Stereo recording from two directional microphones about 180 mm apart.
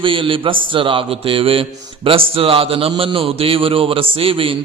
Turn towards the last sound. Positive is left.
turn(degrees=-30)  # may be behind; listen again after turning